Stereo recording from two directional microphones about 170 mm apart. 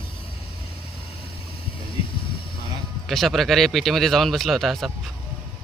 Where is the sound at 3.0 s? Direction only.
Centre (ahead or behind).